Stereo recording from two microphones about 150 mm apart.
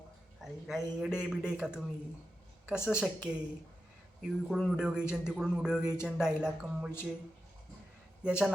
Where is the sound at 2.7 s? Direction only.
15° left (ahead or behind).